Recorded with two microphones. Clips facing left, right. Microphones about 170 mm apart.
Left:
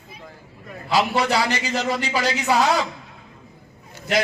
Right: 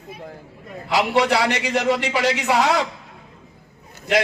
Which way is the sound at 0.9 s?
70° right (ahead or behind).